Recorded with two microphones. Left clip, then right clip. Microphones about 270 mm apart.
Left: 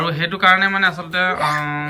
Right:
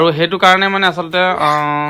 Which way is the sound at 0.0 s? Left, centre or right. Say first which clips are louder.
Right 5 dB; centre.